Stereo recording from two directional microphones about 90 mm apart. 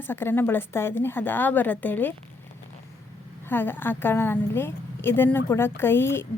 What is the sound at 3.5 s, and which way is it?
Speech, 25° left (ahead or behind).